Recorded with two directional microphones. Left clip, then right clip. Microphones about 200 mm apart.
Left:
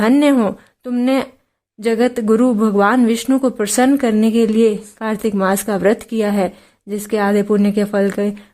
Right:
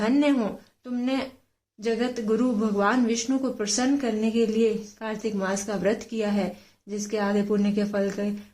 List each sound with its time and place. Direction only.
0.0 s speech: 35° left (ahead or behind)